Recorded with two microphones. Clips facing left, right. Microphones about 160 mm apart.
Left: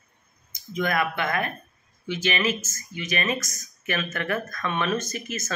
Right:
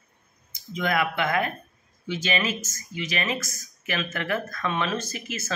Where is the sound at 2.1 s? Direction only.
15° right (ahead or behind).